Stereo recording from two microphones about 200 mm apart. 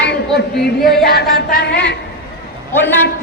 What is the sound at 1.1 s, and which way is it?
Music, 50° left (ahead or behind).